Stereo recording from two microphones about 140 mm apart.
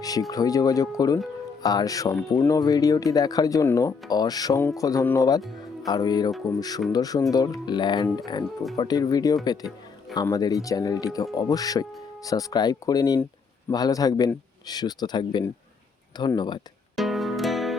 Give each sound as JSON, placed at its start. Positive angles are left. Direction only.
{"t": 0.0, "sound": "speech", "side_deg": 25}
{"t": 16.9, "sound": "music", "side_deg": 0}